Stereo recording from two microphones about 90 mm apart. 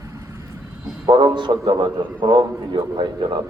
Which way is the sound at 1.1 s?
55° right (ahead or behind).